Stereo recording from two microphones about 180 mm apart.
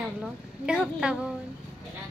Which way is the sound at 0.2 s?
5° right (ahead or behind).